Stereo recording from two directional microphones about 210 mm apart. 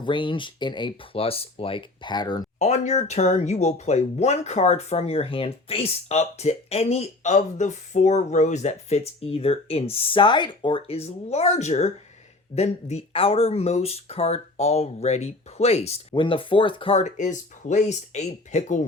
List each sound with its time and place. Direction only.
0.0 s speech: 25° left (ahead or behind)
2.6 s speech: 35° left (ahead or behind)